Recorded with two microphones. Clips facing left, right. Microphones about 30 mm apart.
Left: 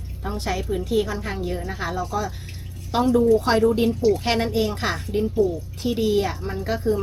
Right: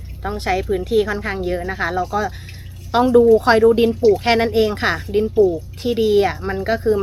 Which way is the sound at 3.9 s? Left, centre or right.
Centre.